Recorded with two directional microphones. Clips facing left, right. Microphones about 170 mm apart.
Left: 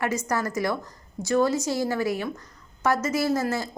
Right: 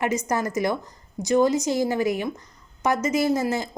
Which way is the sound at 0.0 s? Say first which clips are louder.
Right 2 dB; 20° right (ahead or behind).